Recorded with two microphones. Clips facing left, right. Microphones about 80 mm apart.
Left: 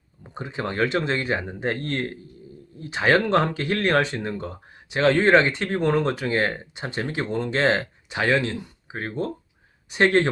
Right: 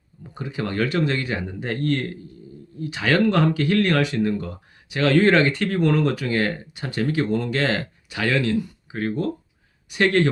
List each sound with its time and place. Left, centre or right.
0.2 s speech: left